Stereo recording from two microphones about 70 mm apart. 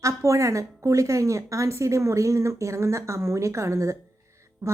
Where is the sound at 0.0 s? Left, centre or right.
Right.